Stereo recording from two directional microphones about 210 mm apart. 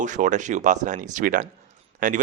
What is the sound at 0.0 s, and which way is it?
Speech, 35° right (ahead or behind).